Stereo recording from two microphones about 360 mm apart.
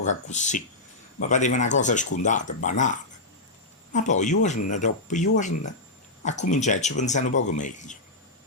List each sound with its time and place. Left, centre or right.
0.3 s speech: centre